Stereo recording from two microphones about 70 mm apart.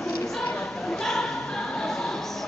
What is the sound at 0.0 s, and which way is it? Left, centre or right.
Choir, centre.